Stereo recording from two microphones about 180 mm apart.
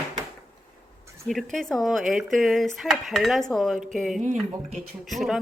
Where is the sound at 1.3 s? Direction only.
Centre (ahead or behind).